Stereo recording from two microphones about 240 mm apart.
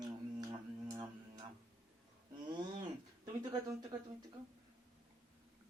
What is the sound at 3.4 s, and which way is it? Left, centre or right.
Speech, centre.